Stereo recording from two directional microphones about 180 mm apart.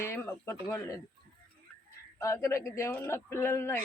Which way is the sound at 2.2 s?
15° left (ahead or behind).